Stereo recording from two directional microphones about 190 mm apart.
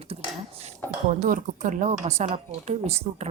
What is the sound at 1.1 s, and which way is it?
Speech, 40° right (ahead or behind).